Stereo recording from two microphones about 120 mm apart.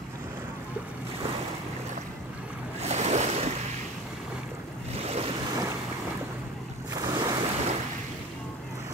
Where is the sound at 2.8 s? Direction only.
65° right (ahead or behind).